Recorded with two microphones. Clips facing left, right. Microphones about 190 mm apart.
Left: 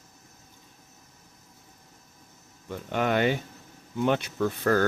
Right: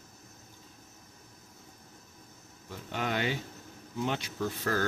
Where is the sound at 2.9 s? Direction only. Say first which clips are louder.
Left 7 dB; 60° left (ahead or behind).